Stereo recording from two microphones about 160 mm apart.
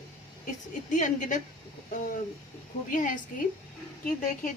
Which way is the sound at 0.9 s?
50° left (ahead or behind).